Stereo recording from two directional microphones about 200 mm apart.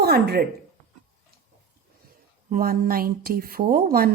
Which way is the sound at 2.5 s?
45° right (ahead or behind).